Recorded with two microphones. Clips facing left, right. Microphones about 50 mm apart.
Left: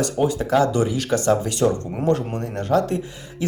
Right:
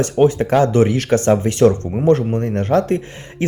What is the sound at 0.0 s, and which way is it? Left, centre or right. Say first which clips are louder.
Speech: right 6 dB; right.